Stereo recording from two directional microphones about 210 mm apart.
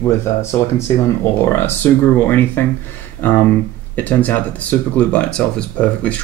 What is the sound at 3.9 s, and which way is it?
Speech, 10° left (ahead or behind).